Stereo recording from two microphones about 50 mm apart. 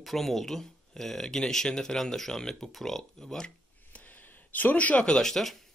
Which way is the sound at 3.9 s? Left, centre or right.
Left.